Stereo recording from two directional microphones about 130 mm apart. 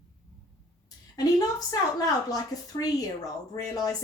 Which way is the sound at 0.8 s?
30° left (ahead or behind).